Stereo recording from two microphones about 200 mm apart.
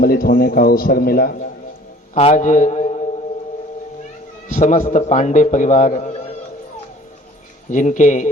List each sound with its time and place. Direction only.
0.0 s a man's voice: 45° left (ahead or behind)
2.1 s a man's voice: 35° left (ahead or behind)
4.4 s a man's voice: 35° left (ahead or behind)
7.7 s a man's voice: 40° left (ahead or behind)